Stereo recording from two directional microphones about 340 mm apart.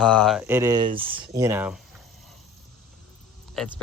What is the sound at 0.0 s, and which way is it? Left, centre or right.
Speech, centre.